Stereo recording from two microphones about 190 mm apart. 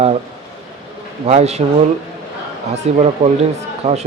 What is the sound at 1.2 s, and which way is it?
Speech, 35° right (ahead or behind).